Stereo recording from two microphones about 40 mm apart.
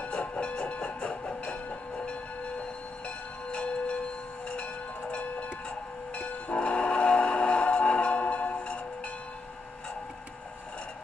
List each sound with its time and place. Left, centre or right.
0.0 s music: left
3.5 s bell: left
6.1 s train: left